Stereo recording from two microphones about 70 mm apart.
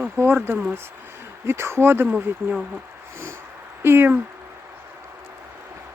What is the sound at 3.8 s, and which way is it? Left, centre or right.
Speech, right.